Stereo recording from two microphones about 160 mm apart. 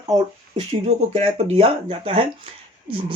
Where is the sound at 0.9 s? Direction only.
40° right (ahead or behind).